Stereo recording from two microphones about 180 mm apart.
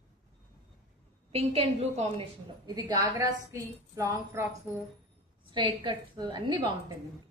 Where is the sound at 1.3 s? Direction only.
35° right (ahead or behind).